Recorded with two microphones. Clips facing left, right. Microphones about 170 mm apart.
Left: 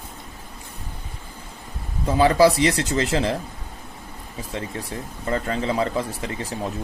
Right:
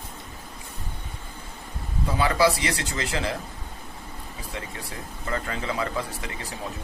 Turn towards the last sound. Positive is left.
turn(degrees=35)  # may be behind; listen again after turning